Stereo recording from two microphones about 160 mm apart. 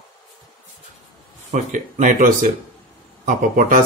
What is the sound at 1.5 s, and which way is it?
A man's voice, 50° right (ahead or behind).